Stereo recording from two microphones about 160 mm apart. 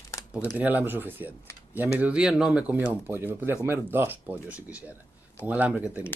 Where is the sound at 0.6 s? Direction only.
10° right (ahead or behind).